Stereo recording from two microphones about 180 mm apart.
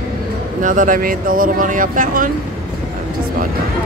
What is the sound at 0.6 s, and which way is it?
Speech, 45° right (ahead or behind).